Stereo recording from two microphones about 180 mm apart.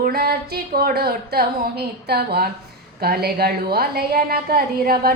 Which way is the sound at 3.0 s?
60° right (ahead or behind).